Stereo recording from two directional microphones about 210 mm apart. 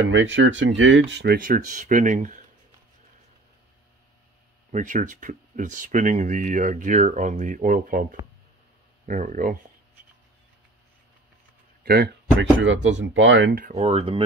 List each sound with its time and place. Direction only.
0.0 s speech: 60° right (ahead or behind); by 2.4 s 35° right (ahead or behind)
4.6 s speech: 35° right (ahead or behind)
11.8 s speech: 50° right (ahead or behind)
13.7 s speech: 30° right (ahead or behind)